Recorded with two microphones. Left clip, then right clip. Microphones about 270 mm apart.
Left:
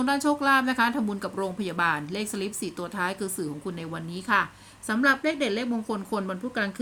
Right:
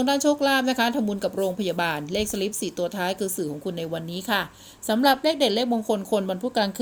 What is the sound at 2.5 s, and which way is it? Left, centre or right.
Speech, left.